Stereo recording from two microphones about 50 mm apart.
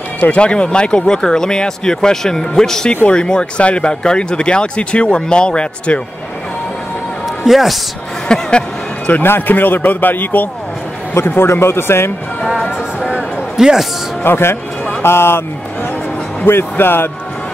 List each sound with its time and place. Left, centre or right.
0.2 s speech: left
2.9 s speech: left
7.4 s speech: centre
8.3 s music: centre
9.2 s a man's voice: left
11.2 s a man's voice: left
13.6 s speech: centre
14.2 s speech: left
16.4 s speech: left